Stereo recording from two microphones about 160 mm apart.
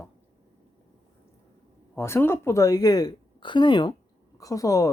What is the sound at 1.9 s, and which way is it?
Speech, 15° left (ahead or behind).